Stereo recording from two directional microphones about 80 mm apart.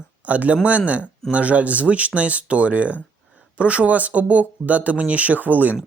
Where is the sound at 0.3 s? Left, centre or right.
Centre.